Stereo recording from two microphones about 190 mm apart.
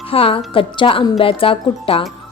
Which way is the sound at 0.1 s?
30° left (ahead or behind).